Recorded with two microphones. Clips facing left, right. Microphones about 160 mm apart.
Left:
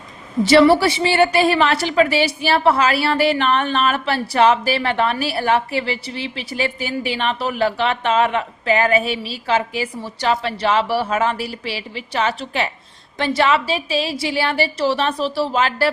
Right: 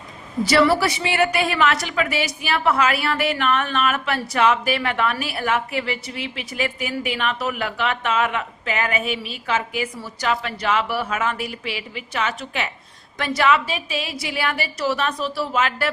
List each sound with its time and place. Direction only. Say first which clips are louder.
0.4 s a woman's voice: left 5 dB; 25° left (ahead or behind)